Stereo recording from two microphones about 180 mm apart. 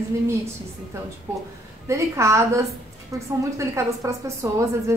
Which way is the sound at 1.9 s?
15° right (ahead or behind).